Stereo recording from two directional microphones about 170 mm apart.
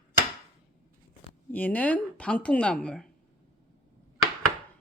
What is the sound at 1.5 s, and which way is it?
A woman's voice, 10° left (ahead or behind).